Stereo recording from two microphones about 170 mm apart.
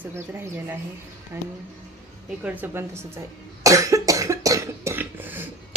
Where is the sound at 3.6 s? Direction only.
20° right (ahead or behind).